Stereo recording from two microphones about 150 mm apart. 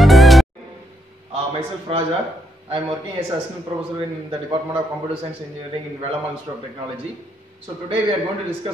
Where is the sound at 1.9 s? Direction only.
40° right (ahead or behind).